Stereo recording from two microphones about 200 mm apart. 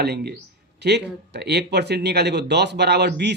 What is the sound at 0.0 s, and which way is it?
Speech, 55° right (ahead or behind).